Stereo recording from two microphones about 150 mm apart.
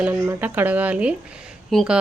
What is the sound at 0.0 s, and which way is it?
Speech, 15° right (ahead or behind).